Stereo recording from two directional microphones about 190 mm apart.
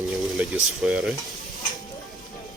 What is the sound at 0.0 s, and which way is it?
Speech, centre (ahead or behind).